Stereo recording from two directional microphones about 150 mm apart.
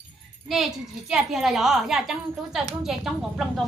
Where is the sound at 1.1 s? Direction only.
Centre (ahead or behind).